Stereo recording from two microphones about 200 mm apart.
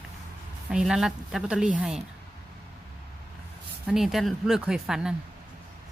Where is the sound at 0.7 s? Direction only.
5° right (ahead or behind).